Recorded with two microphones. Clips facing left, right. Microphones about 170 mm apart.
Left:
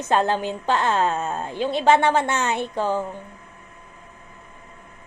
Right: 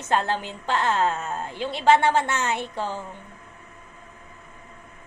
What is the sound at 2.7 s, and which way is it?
Speech, 55° left (ahead or behind).